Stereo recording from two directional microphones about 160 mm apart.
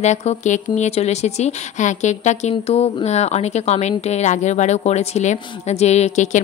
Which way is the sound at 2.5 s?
35° left (ahead or behind).